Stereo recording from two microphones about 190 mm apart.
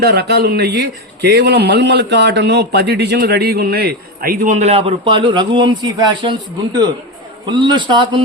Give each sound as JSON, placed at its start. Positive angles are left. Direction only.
{"t": 0.0, "sound": "a man's voice", "side_deg": -55}
{"t": 7.4, "sound": "a man's voice", "side_deg": -25}